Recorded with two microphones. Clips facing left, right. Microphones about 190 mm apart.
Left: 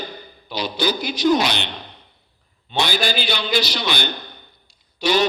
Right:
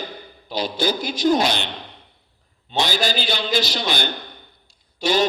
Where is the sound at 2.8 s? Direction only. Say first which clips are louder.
Even; 40° right (ahead or behind).